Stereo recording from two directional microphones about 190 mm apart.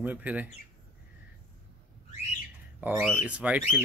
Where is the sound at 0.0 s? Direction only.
10° right (ahead or behind).